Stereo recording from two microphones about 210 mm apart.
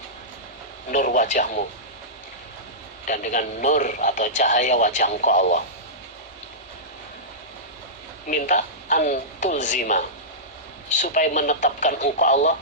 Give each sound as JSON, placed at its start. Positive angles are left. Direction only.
{"t": 0.9, "sound": "speech", "side_deg": 40}
{"t": 3.1, "sound": "speech", "side_deg": 35}
{"t": 8.3, "sound": "speech", "side_deg": 40}